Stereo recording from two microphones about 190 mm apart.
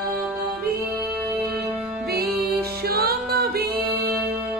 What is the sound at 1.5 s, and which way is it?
Music, 55° right (ahead or behind).